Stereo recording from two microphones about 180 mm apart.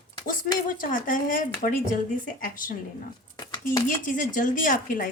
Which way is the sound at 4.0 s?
50° left (ahead or behind).